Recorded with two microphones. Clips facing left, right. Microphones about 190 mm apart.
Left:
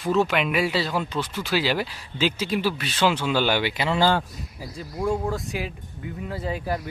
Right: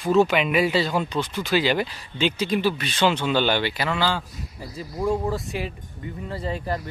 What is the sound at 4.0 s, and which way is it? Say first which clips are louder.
Speech: left 6 dB; 50° left (ahead or behind).